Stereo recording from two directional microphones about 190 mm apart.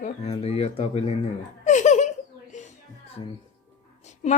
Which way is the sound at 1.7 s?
40° left (ahead or behind).